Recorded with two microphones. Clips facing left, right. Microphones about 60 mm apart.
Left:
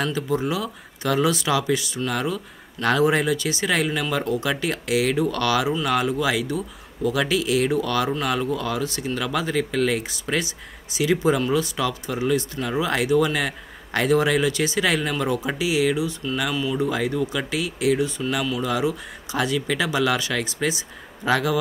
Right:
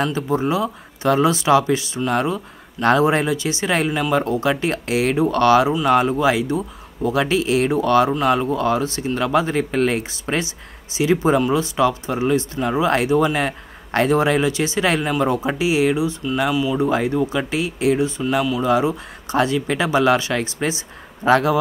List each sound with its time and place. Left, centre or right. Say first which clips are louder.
0.0 s speech: right 4 dB; right